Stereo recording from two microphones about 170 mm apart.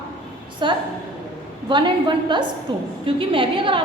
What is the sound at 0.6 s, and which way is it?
A woman's voice, 30° right (ahead or behind).